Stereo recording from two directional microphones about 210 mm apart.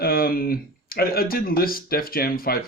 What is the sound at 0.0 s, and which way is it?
Speech, 45° left (ahead or behind).